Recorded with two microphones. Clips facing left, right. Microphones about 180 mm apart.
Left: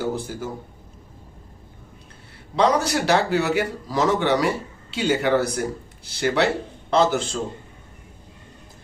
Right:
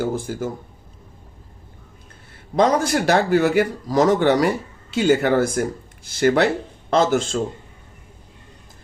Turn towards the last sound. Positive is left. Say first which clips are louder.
# right 2 dB
turn(degrees=-50)  # may be behind; listen again after turning